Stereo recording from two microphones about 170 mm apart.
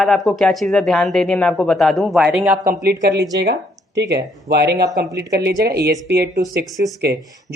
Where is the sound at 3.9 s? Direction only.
80° right.